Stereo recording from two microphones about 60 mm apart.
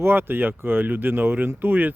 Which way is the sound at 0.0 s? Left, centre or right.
Right.